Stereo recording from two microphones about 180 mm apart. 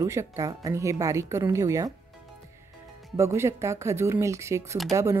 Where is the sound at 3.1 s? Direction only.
15° right (ahead or behind).